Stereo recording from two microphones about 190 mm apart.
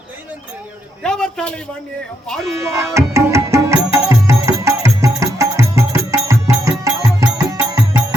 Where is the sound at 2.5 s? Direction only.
15° right (ahead or behind).